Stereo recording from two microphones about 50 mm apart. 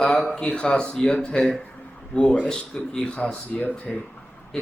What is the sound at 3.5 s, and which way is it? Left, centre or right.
Speech, left.